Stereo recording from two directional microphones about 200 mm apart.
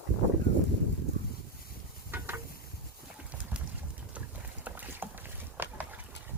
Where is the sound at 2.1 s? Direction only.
10° right (ahead or behind).